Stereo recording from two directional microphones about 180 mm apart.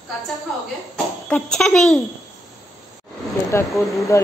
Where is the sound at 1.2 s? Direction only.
5° left (ahead or behind).